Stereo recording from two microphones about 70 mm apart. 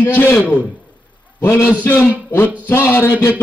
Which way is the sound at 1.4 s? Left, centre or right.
Left.